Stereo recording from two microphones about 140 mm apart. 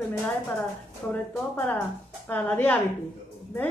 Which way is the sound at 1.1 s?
15° left (ahead or behind).